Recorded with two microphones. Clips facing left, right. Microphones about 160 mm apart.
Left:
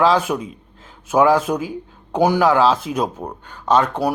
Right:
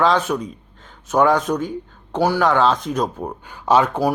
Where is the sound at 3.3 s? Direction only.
10° right (ahead or behind).